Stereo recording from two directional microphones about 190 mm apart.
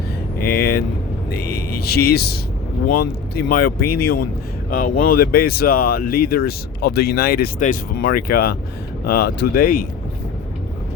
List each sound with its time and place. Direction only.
0.5 s speech: 55° left (ahead or behind)